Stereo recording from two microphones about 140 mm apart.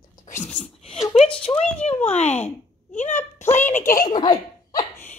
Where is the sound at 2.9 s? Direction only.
55° left (ahead or behind).